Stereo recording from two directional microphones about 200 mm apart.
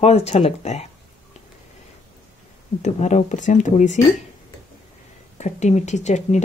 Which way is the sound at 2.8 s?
35° left (ahead or behind).